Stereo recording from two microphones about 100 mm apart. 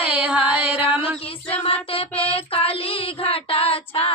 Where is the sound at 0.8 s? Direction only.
65° left (ahead or behind).